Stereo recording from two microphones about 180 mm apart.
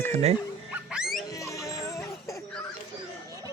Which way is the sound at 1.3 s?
15° left (ahead or behind).